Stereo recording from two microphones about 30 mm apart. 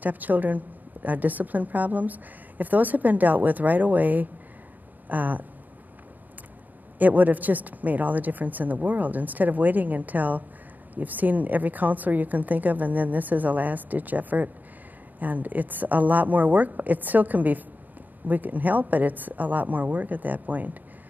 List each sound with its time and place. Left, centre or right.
0.0 s a woman's voice: right
7.0 s a woman's voice: right